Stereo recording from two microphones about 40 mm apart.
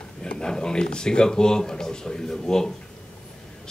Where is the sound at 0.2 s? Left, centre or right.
Left.